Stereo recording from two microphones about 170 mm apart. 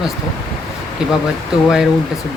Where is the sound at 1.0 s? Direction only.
5° right (ahead or behind).